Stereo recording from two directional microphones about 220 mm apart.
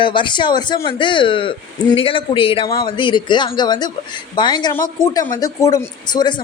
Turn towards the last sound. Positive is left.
turn(degrees=20)  # may be behind; listen again after turning